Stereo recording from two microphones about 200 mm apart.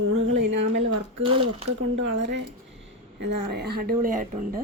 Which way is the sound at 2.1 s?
60° right (ahead or behind).